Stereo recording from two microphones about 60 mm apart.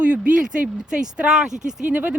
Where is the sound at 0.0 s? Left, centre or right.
Centre.